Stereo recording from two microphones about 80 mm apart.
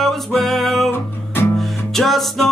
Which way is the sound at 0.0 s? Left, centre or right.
Centre.